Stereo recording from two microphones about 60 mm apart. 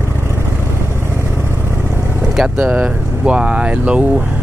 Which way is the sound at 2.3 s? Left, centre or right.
Centre.